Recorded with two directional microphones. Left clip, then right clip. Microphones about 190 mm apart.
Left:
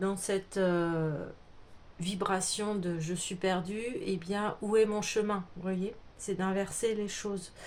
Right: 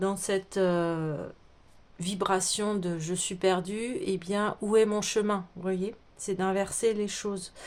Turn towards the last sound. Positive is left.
turn(degrees=-35)  # may be behind; listen again after turning